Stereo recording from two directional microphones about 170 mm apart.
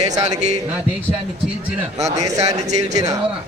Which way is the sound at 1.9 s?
40° right (ahead or behind).